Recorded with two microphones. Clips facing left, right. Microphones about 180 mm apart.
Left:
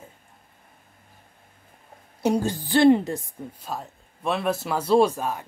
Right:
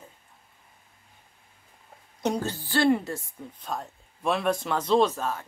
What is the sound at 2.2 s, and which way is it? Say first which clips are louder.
A man's voice: left 5 dB; 15° left (ahead or behind).